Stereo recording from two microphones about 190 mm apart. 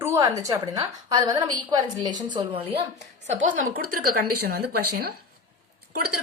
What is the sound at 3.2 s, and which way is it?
A woman's voice, 40° right (ahead or behind).